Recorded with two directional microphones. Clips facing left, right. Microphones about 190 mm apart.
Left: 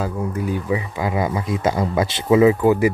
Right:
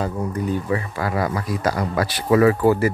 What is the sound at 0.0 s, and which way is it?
Speech, 5° left (ahead or behind).